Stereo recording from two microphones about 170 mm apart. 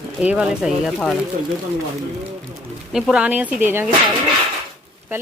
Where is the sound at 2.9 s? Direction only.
5° right (ahead or behind).